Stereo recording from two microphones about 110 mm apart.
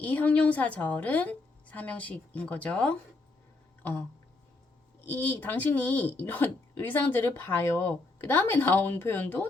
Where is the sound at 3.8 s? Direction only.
15° left (ahead or behind).